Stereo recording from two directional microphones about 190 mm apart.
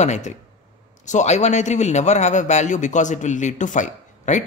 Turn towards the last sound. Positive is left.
turn(degrees=40)  # may be behind; listen again after turning